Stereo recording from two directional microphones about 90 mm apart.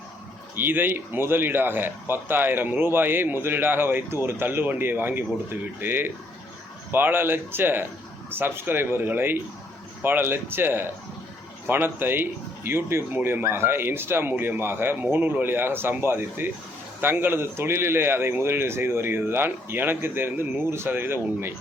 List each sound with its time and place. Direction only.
0.5 s speech: 20° right (ahead or behind)